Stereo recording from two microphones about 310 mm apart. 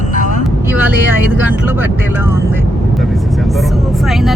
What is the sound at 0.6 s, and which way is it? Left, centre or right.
Vehicle, centre.